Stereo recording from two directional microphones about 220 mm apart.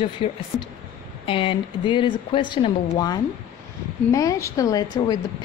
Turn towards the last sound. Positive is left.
turn(degrees=15)  # may be behind; listen again after turning